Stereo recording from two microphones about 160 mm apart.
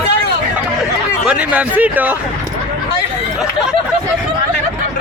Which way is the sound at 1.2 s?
10° right (ahead or behind).